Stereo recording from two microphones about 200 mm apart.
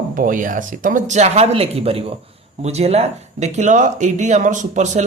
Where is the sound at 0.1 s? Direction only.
45° right (ahead or behind).